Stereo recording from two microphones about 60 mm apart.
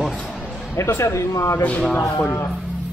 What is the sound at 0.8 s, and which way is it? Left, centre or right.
Speech, left.